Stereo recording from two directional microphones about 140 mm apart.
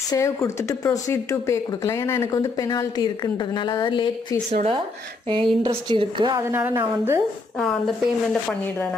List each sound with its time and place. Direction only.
0.1 s speech: 20° left (ahead or behind)
4.5 s speech: 55° right (ahead or behind)
5.3 s a woman's voice: 35° right (ahead or behind)
6.5 s a woman's voice: 15° right (ahead or behind)